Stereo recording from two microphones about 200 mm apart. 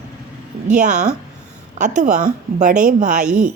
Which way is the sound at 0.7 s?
35° right (ahead or behind).